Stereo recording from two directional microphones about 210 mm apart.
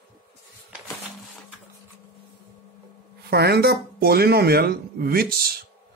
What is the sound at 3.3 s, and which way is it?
A man's voice, 50° right (ahead or behind).